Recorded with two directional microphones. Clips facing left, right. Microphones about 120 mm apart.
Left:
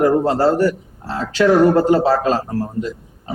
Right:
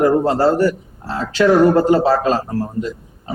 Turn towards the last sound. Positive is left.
turn(degrees=-15)  # may be behind; listen again after turning